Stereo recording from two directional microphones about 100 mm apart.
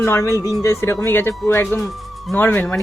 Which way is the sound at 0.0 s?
30° left (ahead or behind).